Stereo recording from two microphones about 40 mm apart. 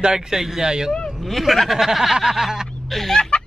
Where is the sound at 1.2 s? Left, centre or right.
Centre.